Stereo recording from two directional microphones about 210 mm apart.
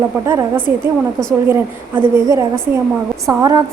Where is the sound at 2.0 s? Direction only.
15° right (ahead or behind).